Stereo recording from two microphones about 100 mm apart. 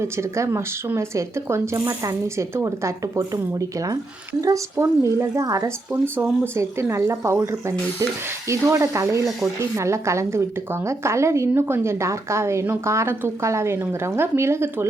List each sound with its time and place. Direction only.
0.0 s a woman's voice: 30° right (ahead or behind)